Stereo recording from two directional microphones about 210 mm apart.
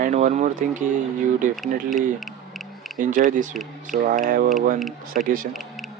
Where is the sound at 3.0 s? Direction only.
40° right (ahead or behind).